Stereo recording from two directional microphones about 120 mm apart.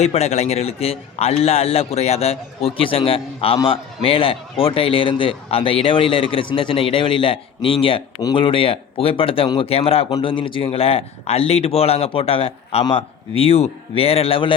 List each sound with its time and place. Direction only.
0.0 s a man's voice: 65° left (ahead or behind)
10.2 s a man's voice: 45° left (ahead or behind)